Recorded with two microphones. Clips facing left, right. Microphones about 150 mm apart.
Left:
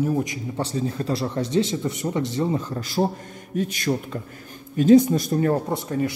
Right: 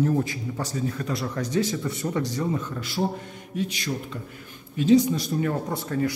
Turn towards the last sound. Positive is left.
turn(degrees=20)  # may be behind; listen again after turning